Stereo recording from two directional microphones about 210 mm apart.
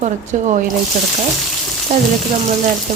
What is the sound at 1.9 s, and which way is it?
Speech, 30° right (ahead or behind).